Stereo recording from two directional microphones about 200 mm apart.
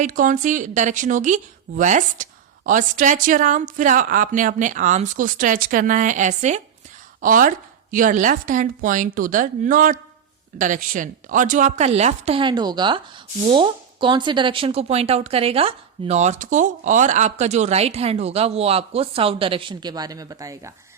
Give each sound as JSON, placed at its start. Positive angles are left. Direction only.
{"t": 0.0, "sound": "a woman's voice", "side_deg": -40}